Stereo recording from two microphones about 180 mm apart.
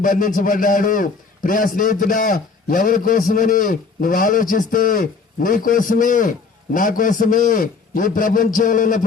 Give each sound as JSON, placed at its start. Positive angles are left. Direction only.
{"t": 0.0, "sound": "a man's voice", "side_deg": 50}